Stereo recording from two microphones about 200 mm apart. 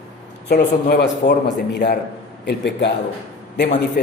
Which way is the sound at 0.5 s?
55° left (ahead or behind).